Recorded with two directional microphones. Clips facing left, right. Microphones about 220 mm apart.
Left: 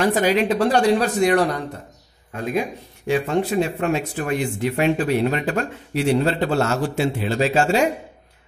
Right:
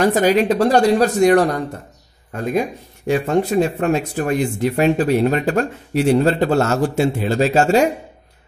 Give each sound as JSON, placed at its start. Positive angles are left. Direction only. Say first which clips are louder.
{"t": 0.0, "sound": "speech", "louder": "right 3 dB", "side_deg": -45}